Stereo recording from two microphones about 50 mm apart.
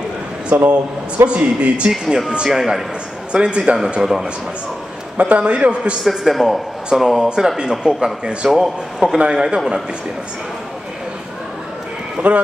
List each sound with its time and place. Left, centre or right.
0.7 s speech: right
1.9 s speech: centre
4.0 s speech: centre
5.1 s speech: right
6.0 s a man's voice: centre
12.2 s speech: right